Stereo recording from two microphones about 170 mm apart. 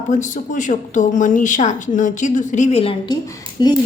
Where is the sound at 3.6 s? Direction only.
25° left (ahead or behind).